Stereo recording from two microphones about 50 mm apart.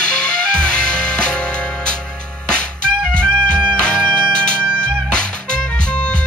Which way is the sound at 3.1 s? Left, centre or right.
Centre.